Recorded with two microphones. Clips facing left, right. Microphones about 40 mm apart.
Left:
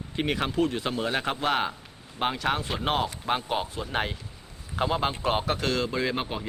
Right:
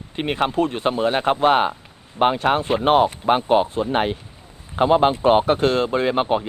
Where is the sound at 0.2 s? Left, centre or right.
Right.